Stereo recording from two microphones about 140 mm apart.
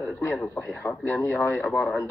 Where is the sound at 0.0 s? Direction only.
15° left (ahead or behind).